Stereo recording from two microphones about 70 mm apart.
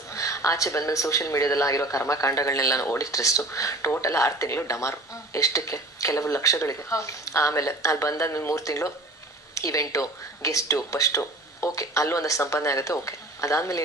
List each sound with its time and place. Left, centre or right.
0.1 s speech: left